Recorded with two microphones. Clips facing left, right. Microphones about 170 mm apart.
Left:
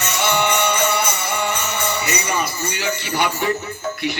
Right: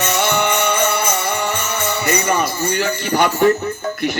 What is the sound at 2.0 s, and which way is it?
A man's voice, 50° right (ahead or behind).